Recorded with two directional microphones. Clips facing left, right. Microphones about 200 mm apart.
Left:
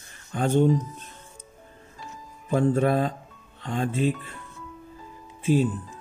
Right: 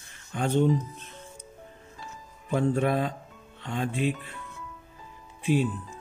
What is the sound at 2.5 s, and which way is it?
Speech, 45° left (ahead or behind).